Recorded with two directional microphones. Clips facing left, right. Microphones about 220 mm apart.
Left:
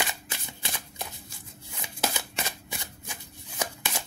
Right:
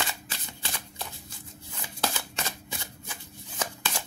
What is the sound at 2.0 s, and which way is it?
Shuffling cards, 15° left (ahead or behind).